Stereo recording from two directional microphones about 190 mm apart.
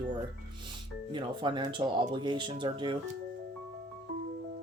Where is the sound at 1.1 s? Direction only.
25° right (ahead or behind).